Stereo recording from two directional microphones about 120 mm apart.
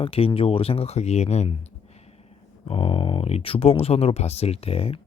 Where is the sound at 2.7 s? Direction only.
50° left (ahead or behind).